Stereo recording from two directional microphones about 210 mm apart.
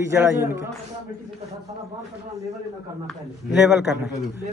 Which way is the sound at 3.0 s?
Centre (ahead or behind).